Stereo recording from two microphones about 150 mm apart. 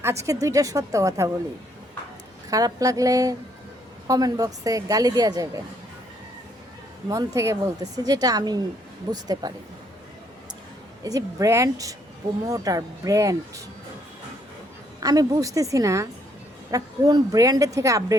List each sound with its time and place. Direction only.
0.0 s speech: 20° right (ahead or behind)
2.5 s speech: 25° right (ahead or behind)
7.1 s speech: 20° right (ahead or behind)
11.0 s speech: 25° right (ahead or behind)
15.0 s speech: 25° right (ahead or behind)